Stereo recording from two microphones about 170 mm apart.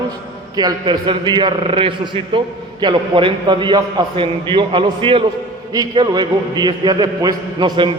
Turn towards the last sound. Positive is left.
turn(degrees=-25)  # may be behind; listen again after turning